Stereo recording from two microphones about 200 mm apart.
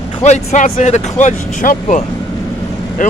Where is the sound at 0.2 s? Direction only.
35° left (ahead or behind).